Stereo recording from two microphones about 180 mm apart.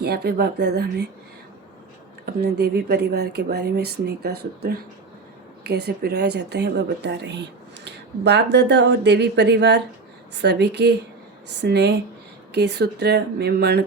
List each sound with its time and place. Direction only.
0.0 s speech: 65° right (ahead or behind)
2.2 s speech: 65° right (ahead or behind)